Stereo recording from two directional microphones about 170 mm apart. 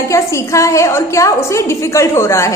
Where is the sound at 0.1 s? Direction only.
15° left (ahead or behind).